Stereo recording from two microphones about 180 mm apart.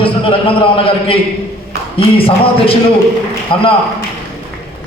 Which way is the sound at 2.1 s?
30° left (ahead or behind).